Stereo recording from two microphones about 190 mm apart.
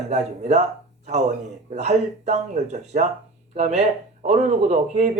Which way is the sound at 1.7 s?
35° right (ahead or behind).